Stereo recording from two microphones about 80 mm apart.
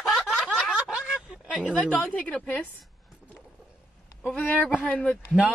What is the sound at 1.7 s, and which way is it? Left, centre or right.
Speech, centre.